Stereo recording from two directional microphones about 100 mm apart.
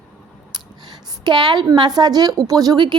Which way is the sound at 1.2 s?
50° right (ahead or behind).